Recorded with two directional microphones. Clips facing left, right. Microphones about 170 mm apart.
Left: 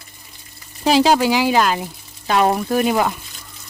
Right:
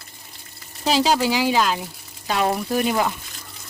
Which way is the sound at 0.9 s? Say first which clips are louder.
Left 5 dB; 65° left (ahead or behind).